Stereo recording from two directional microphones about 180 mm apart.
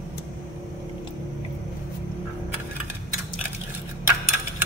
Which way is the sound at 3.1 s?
10° right (ahead or behind).